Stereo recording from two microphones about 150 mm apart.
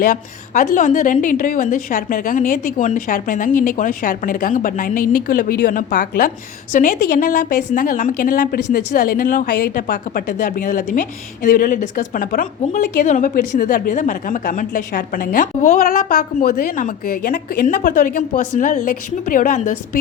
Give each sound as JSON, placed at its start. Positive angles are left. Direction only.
{"t": 0.0, "sound": "a woman's voice", "side_deg": 55}